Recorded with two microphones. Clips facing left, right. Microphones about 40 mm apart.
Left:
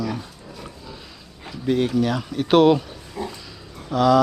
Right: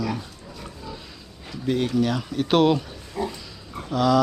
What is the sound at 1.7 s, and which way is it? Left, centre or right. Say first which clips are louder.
Speech: left 2 dB; centre.